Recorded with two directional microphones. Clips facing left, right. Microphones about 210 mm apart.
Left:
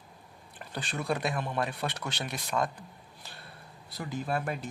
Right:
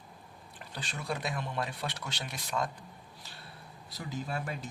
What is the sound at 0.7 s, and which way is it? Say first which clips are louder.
Speech: left 5 dB; 55° left (ahead or behind).